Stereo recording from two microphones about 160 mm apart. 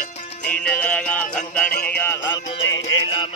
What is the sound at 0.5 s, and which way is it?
Music, 10° left (ahead or behind).